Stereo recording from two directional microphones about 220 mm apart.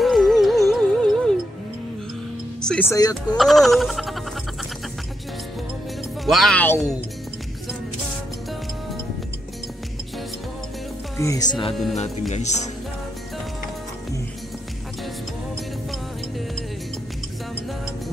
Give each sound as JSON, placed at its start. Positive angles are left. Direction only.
{"t": 0.0, "sound": "music", "side_deg": 0}
{"t": 2.6, "sound": "speech", "side_deg": 5}
{"t": 3.3, "sound": "a sound", "side_deg": 0}
{"t": 6.2, "sound": "a sound", "side_deg": 0}
{"t": 11.1, "sound": "speech", "side_deg": 15}
{"t": 11.9, "sound": "music", "side_deg": 30}
{"t": 15.9, "sound": "music", "side_deg": 0}